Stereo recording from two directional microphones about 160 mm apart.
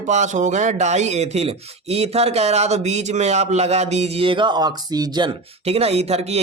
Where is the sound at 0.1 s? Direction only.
45° right (ahead or behind); by 5.3 s 25° right (ahead or behind).